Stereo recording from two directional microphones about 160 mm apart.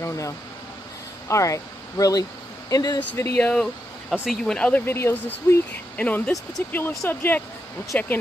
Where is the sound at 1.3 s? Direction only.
20° left (ahead or behind).